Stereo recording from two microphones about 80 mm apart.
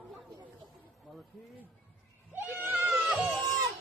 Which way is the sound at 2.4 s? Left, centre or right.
Right.